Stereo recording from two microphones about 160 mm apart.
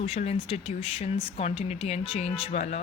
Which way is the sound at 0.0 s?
40° left (ahead or behind).